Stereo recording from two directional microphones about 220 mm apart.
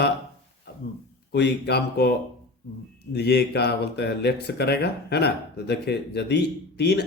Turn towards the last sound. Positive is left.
turn(degrees=50)  # may be behind; listen again after turning